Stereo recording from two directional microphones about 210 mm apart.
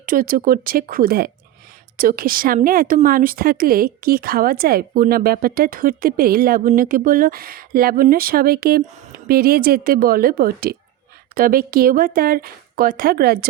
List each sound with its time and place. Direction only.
0.0 s speech: 40° right (ahead or behind)